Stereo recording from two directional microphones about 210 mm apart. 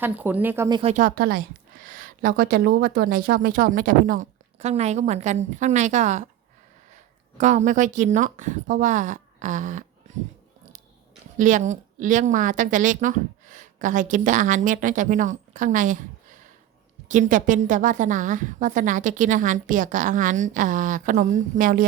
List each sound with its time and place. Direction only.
0.0 s speech: 10° right (ahead or behind)
0.8 s a woman's voice: 35° right (ahead or behind)
7.3 s a woman's voice: 35° right (ahead or behind)
11.3 s a woman's voice: 35° right (ahead or behind)
17.1 s a woman's voice: 35° right (ahead or behind)